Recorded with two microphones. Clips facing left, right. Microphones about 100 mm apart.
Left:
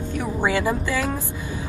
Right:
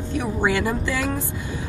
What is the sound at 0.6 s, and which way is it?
Speech, 15° left (ahead or behind).